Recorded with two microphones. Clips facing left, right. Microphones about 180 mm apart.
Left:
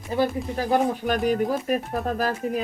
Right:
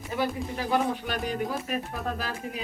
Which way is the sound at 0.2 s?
45° left (ahead or behind).